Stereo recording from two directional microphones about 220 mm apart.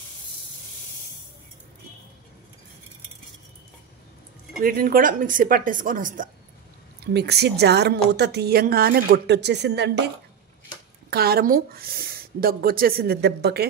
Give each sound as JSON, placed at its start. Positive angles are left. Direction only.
{"t": 4.6, "sound": "a woman's voice", "side_deg": -40}
{"t": 11.1, "sound": "speech", "side_deg": -45}